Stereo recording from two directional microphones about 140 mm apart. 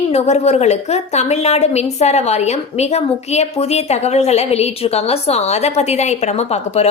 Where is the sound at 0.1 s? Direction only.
50° left (ahead or behind).